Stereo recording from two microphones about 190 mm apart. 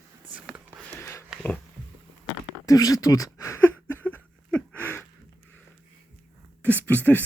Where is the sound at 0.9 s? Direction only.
15° left (ahead or behind).